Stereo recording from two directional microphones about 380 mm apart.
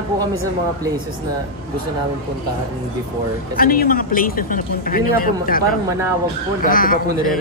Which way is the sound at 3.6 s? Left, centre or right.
Left.